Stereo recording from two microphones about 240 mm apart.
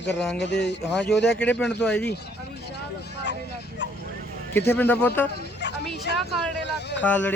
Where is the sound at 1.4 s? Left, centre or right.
Centre.